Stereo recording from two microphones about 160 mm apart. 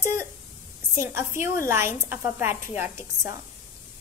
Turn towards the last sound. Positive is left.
turn(degrees=-15)  # may be behind; listen again after turning